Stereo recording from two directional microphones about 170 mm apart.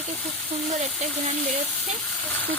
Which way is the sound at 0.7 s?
40° right (ahead or behind).